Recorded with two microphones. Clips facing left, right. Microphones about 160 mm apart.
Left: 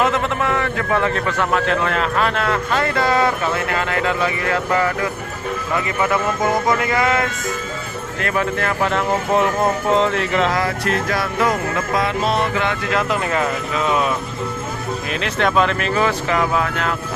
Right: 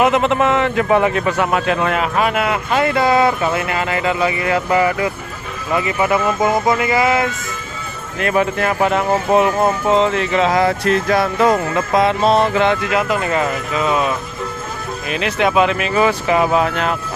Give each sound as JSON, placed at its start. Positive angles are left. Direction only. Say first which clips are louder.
{"t": 0.0, "sound": "a man's voice", "louder": "right 5 dB", "side_deg": -20}
{"t": 8.2, "sound": "a man's voice", "louder": "right 4 dB", "side_deg": -15}
{"t": 11.1, "sound": "music", "louder": "right 7 dB", "side_deg": -25}
{"t": 12.9, "sound": "speech", "louder": "right 2 dB", "side_deg": -5}
{"t": 15.1, "sound": "a man's voice", "louder": "right 3 dB", "side_deg": -5}